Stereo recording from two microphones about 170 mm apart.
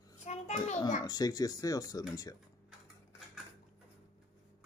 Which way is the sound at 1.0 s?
20° left (ahead or behind).